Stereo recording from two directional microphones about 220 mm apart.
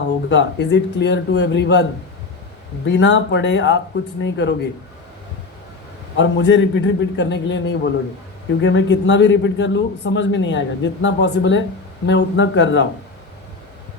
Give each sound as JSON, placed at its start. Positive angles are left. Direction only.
{"t": 0.3, "sound": "a man's voice", "side_deg": 50}
{"t": 6.1, "sound": "a man's voice", "side_deg": 55}